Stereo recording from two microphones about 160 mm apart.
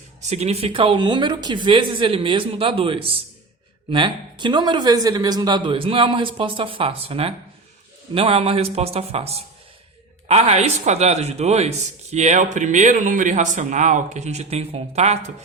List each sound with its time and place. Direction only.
0.3 s a man's voice: 40° right (ahead or behind)